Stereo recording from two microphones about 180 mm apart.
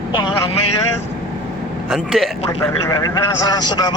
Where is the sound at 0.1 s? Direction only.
25° left (ahead or behind).